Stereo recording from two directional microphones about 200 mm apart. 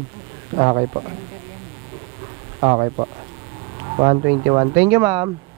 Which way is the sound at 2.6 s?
25° right (ahead or behind).